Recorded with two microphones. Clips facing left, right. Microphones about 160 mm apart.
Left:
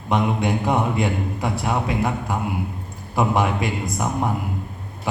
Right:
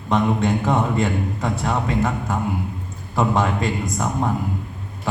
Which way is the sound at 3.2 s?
20° left (ahead or behind).